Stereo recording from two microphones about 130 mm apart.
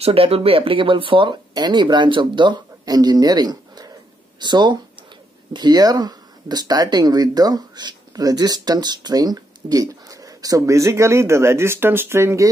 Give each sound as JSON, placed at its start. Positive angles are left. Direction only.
{"t": 0.0, "sound": "speech", "side_deg": -45}